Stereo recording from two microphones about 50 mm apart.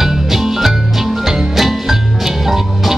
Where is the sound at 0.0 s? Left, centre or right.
Centre.